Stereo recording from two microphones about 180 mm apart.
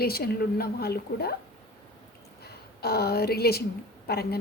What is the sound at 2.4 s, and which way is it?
A woman's voice, 60° left (ahead or behind).